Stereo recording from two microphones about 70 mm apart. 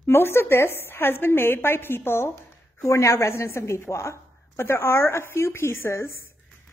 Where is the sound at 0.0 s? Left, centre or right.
Left.